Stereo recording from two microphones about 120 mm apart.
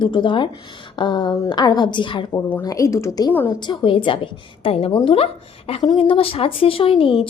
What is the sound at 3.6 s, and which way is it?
A woman's voice, 40° left (ahead or behind).